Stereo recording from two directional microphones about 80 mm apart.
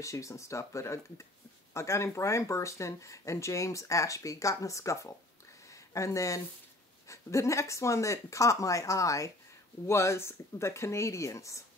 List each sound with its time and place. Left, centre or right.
0.0 s speech: left